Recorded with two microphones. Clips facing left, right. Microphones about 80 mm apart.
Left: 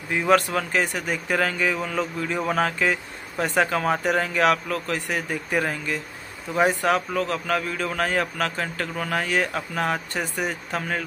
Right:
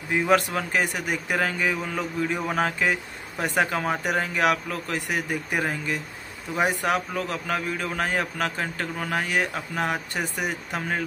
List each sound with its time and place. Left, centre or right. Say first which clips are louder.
0.1 s a man's voice: left 2 dB; centre